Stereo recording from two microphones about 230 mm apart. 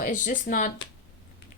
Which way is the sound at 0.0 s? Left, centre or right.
Left.